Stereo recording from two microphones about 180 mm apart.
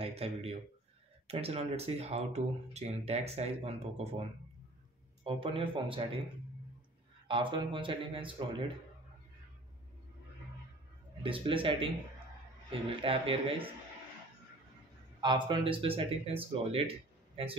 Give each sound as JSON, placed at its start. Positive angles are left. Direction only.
{"t": 0.0, "sound": "speech", "side_deg": -35}
{"t": 7.2, "sound": "speech", "side_deg": -25}
{"t": 11.2, "sound": "speech", "side_deg": -30}
{"t": 13.0, "sound": "speech", "side_deg": -30}
{"t": 15.1, "sound": "speech", "side_deg": -25}